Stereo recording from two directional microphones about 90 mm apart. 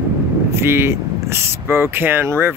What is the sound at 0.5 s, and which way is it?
Speech, 25° right (ahead or behind).